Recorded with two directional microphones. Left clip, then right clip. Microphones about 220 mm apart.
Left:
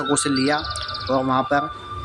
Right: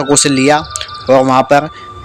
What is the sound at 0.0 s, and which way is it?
Speech, 30° right (ahead or behind).